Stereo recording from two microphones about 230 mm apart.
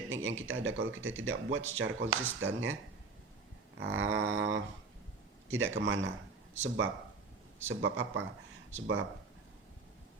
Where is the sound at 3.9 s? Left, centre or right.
Right.